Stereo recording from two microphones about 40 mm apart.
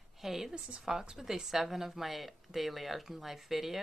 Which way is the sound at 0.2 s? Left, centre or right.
Centre.